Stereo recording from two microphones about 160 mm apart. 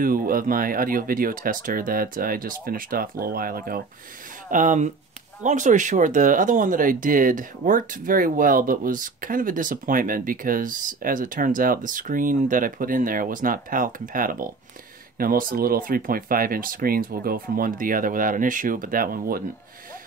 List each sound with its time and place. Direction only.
0.0 s speech: 60° right (ahead or behind)
4.5 s speech: 55° right (ahead or behind)